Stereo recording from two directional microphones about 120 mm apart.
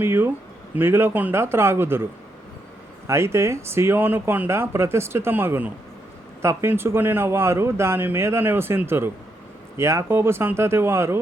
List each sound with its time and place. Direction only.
0.0 s speech: 20° right (ahead or behind)
3.1 s speech: 20° right (ahead or behind)